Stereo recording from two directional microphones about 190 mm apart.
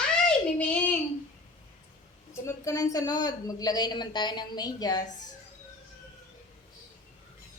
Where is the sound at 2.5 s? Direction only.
15° left (ahead or behind).